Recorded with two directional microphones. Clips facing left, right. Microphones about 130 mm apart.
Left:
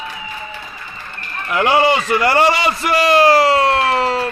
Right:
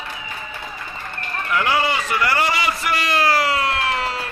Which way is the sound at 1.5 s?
25° left (ahead or behind).